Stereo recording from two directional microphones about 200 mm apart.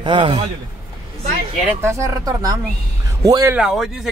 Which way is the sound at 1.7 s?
15° right (ahead or behind).